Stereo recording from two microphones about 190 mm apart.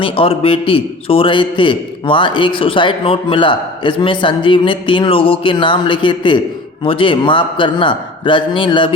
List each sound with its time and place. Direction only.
0.0 s a man's voice: 30° left (ahead or behind)